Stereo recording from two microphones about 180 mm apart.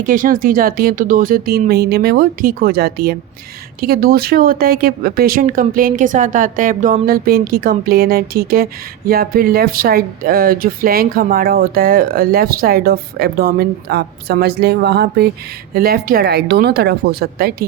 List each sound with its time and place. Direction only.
0.0 s speech: 50° right (ahead or behind)